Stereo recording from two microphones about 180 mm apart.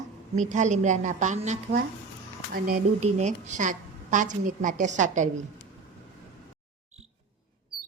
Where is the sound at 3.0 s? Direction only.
40° right (ahead or behind).